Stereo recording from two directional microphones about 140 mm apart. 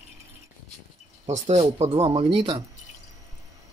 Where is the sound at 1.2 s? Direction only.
50° right (ahead or behind); by 2.6 s 35° right (ahead or behind).